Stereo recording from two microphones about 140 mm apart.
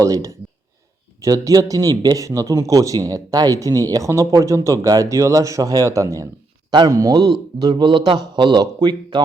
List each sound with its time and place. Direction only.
0.0 s a man's voice: 25° right (ahead or behind)